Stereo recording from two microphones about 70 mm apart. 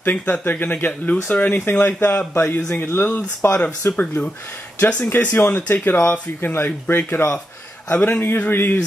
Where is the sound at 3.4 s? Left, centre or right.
Left.